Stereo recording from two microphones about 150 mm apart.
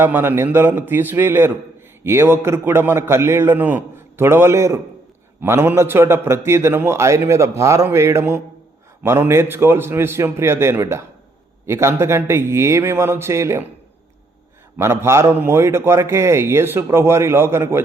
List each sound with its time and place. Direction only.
0.0 s a man's voice: 15° right (ahead or behind)
14.8 s a man's voice: 15° right (ahead or behind)